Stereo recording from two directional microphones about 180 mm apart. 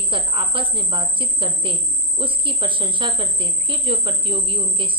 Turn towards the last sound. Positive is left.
turn(degrees=-30)  # may be behind; listen again after turning